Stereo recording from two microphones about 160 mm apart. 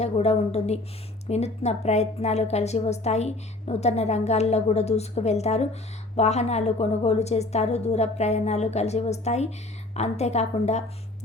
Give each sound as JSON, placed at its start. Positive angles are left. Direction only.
{"t": 0.0, "sound": "a woman's voice", "side_deg": 40}